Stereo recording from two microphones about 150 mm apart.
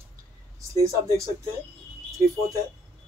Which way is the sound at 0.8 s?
20° right (ahead or behind).